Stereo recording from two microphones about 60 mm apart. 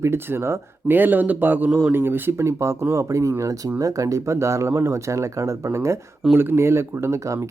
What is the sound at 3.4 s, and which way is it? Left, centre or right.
Speech, right.